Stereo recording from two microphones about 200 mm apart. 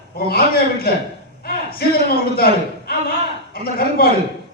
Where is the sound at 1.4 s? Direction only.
50° left (ahead or behind).